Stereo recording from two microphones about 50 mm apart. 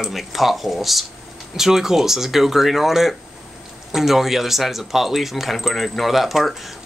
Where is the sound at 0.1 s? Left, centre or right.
Centre.